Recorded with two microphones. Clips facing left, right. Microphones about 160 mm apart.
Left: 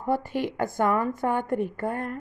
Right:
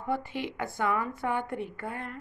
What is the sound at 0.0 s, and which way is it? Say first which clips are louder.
A woman's voice: left 6 dB; 40° left (ahead or behind).